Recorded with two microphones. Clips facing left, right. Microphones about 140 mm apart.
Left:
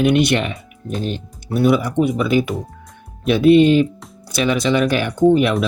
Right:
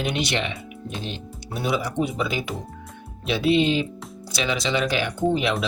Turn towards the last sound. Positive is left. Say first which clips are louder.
# left 8 dB
turn(degrees=55)  # may be behind; listen again after turning